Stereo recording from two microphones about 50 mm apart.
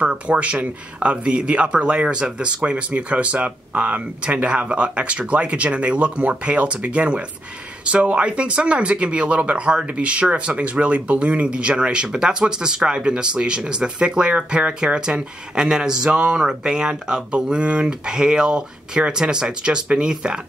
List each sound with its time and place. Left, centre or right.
0.0 s speech: right